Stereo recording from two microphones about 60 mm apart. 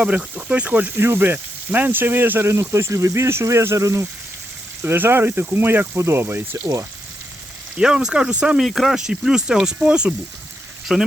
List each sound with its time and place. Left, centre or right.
0.0 s speech: right
0.9 s speech: right
4.8 s speech: right
5.9 s speech: right
7.8 s speech: centre
8.5 s speech: centre
10.9 s speech: centre